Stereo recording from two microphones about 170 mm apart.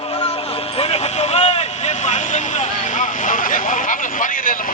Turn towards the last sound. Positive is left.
turn(degrees=50)  # may be behind; listen again after turning